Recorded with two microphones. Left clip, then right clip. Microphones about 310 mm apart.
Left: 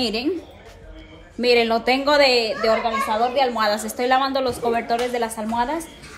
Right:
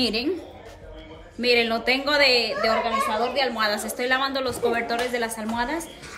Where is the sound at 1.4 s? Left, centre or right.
Centre.